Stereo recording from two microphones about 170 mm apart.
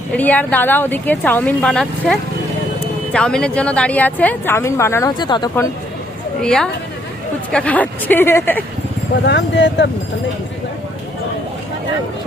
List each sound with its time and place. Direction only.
0.1 s speech: 10° left (ahead or behind)
5.2 s speech: 25° left (ahead or behind)
6.4 s speech: 5° left (ahead or behind)
9.2 s speech: 90° left